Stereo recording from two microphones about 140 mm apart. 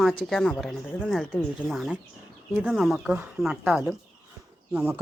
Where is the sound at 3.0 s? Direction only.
10° right (ahead or behind).